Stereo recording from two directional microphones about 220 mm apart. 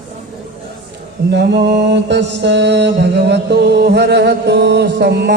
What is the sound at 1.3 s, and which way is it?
Mantra, 50° right (ahead or behind).